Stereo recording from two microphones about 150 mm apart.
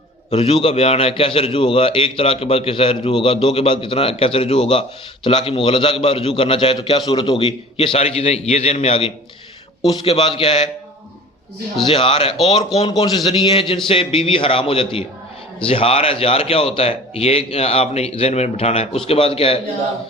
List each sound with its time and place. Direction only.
0.3 s a man's voice: 40° left (ahead or behind)
11.9 s a man's voice: 35° left (ahead or behind)